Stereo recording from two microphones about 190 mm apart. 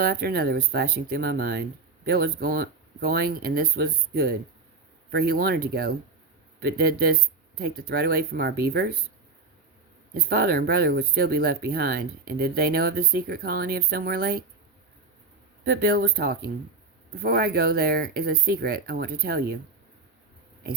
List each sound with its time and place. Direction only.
0.0 s speech: 55° right (ahead or behind)
10.2 s speech: 55° right (ahead or behind)
15.6 s speech: 50° right (ahead or behind)